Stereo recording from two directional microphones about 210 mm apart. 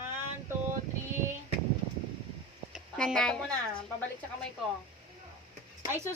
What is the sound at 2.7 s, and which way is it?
Speech, centre (ahead or behind).